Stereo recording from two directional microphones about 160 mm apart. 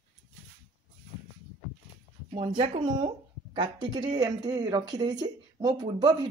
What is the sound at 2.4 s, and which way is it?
Speech, 30° right (ahead or behind).